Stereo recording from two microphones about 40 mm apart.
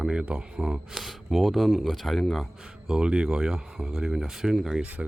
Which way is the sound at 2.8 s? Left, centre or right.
Centre.